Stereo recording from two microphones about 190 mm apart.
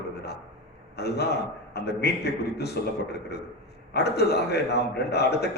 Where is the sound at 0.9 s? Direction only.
60° left (ahead or behind).